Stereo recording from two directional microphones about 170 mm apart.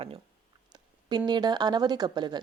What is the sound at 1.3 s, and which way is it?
A woman's voice, 25° right (ahead or behind).